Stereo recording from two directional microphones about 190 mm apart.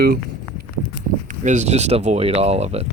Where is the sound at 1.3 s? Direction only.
40° right (ahead or behind).